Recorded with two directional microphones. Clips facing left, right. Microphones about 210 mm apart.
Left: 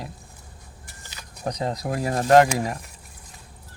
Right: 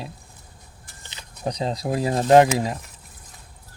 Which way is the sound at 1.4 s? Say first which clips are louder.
Right 2 dB; 10° right (ahead or behind).